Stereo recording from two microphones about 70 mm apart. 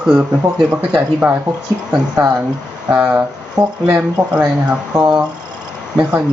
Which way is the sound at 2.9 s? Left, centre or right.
Centre.